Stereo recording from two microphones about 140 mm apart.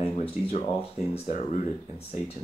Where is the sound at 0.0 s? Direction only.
45° left (ahead or behind).